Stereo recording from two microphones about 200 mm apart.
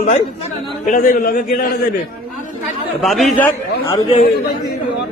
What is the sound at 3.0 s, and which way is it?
Speech, centre (ahead or behind).